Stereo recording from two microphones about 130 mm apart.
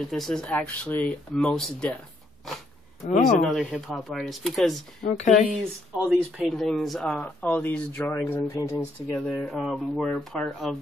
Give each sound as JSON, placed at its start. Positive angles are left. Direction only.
{"t": 0.1, "sound": "speech", "side_deg": 5}
{"t": 3.3, "sound": "speech", "side_deg": 0}
{"t": 5.0, "sound": "speech", "side_deg": 65}
{"t": 5.9, "sound": "speech", "side_deg": -5}
{"t": 9.0, "sound": "speech", "side_deg": 5}